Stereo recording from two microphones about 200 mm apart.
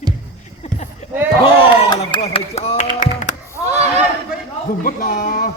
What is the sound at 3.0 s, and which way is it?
Tap, 40° left (ahead or behind).